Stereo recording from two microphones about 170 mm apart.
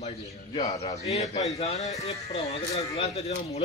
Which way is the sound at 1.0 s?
40° left (ahead or behind).